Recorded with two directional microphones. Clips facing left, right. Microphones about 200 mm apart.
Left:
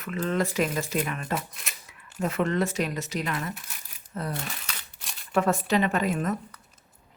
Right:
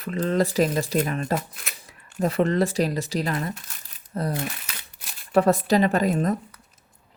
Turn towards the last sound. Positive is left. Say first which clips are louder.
# right 5 dB
turn(degrees=-35)  # may be behind; listen again after turning